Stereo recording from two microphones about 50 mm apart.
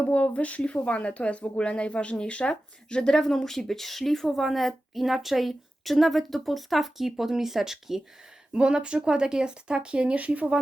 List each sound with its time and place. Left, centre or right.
0.0 s speech: left; by 8.0 s centre
8.5 s speech: centre